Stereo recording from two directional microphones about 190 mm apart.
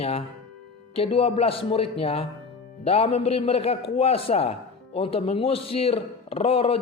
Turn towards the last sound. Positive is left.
turn(degrees=30)  # may be behind; listen again after turning